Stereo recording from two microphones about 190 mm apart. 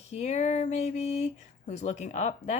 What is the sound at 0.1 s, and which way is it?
A woman's voice, 35° left (ahead or behind).